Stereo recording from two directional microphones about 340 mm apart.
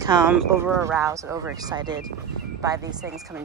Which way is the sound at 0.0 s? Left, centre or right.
Centre.